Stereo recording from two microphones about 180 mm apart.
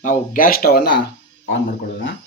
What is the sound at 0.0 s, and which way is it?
Speech, 45° left (ahead or behind).